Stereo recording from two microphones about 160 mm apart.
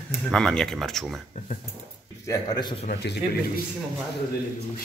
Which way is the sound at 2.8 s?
80° left.